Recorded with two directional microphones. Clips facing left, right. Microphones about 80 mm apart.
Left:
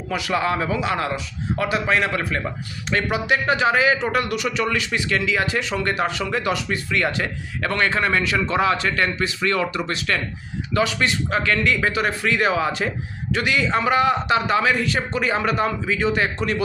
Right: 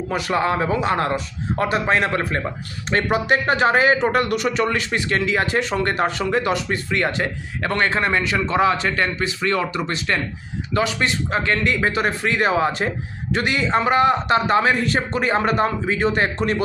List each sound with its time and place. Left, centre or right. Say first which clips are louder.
0.1 s a man's voice: right 1 dB; right